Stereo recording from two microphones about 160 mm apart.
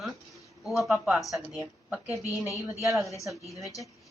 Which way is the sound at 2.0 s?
20° left (ahead or behind).